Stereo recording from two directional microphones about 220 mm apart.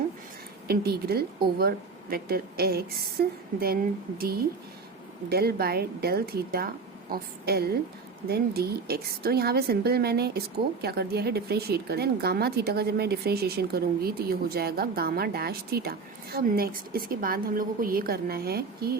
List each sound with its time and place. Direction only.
0.7 s a woman's voice: 45° right (ahead or behind)